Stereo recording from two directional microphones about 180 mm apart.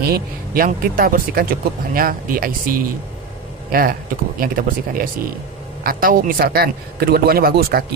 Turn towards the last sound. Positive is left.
turn(degrees=-55)  # may be behind; listen again after turning